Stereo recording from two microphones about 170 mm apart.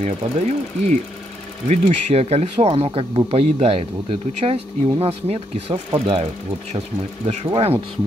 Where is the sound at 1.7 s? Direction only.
40° right (ahead or behind).